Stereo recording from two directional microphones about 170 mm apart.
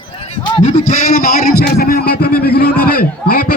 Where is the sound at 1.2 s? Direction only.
60° left (ahead or behind).